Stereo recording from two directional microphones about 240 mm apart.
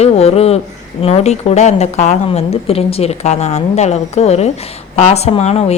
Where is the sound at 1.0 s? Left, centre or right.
Left.